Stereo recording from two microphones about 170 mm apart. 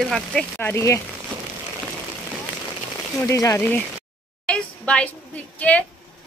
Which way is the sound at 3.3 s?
15° left (ahead or behind).